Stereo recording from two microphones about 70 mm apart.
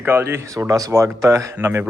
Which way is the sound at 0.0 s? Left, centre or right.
Right.